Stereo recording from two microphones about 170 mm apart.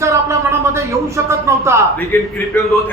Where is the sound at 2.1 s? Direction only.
10° left (ahead or behind).